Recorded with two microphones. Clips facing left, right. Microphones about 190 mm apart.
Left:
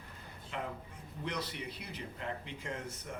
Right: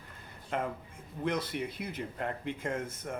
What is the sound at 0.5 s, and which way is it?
Speech, 50° right (ahead or behind).